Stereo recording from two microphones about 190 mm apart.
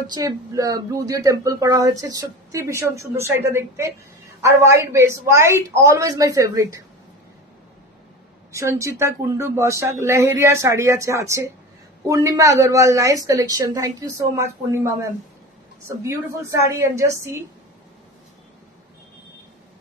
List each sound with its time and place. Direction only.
0.0 s speech: 20° right (ahead or behind)
8.5 s speech: 15° right (ahead or behind)